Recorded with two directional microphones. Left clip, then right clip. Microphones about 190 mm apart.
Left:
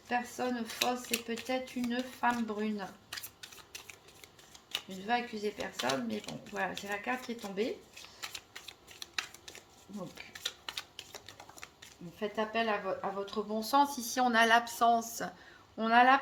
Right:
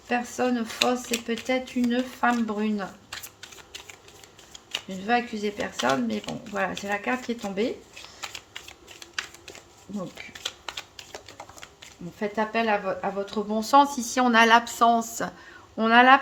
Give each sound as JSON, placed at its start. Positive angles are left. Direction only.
{"t": 0.1, "sound": "speech", "side_deg": -25}
{"t": 5.0, "sound": "speech", "side_deg": -30}
{"t": 10.3, "sound": "typing", "side_deg": 0}
{"t": 12.2, "sound": "speech", "side_deg": -30}